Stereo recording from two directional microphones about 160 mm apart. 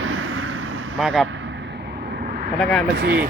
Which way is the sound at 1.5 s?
90° right.